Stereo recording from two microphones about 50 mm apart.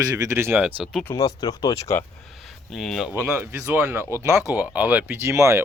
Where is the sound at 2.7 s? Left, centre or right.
Centre.